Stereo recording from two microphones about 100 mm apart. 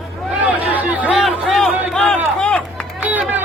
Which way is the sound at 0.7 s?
15° right (ahead or behind).